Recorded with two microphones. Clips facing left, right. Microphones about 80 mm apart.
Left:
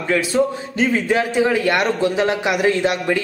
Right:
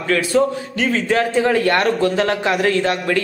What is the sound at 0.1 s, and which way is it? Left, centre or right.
A man's voice, centre.